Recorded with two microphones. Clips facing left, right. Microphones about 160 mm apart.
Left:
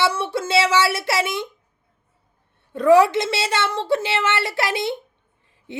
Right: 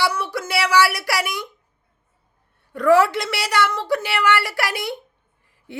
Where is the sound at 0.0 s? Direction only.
25° left (ahead or behind).